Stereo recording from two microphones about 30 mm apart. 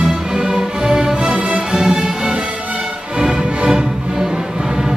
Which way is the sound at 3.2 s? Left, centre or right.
Right.